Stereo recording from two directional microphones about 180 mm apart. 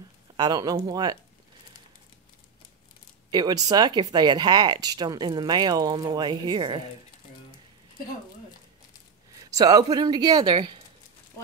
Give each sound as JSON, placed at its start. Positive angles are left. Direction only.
{"t": 0.4, "sound": "speech", "side_deg": -20}
{"t": 3.3, "sound": "speech", "side_deg": -20}
{"t": 9.5, "sound": "speech", "side_deg": -20}